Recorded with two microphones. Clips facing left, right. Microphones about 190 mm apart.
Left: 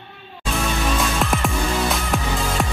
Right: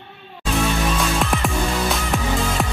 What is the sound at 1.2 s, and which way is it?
Music, centre (ahead or behind).